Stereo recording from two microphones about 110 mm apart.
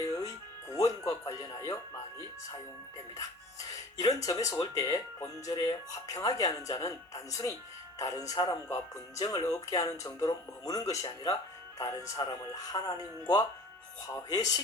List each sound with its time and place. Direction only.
0.0 s music: 30° left (ahead or behind)
4.0 s speech: 35° left (ahead or behind)
14.1 s speech: 35° left (ahead or behind)